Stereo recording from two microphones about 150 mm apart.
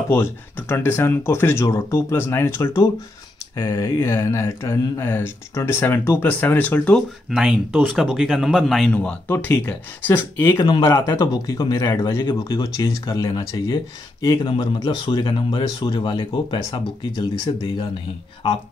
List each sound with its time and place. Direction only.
0.1 s speech: 15° left (ahead or behind)
7.2 s speech: 5° right (ahead or behind); by 10.6 s 15° left (ahead or behind)
10.6 s speech: 30° left (ahead or behind)
14.4 s speech: 35° left (ahead or behind)